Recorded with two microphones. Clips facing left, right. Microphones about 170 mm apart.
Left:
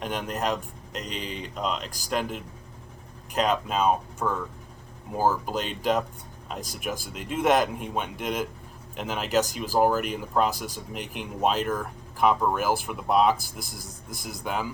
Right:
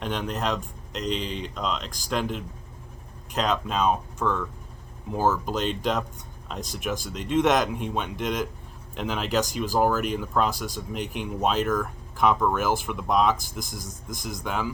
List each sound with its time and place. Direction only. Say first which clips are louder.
0.0 s speech: even; 10° left (ahead or behind)